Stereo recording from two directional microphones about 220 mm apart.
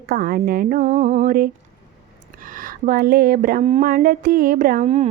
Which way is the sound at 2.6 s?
40° right (ahead or behind).